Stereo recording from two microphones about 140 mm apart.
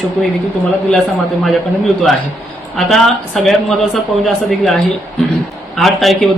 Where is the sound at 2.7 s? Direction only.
Centre (ahead or behind).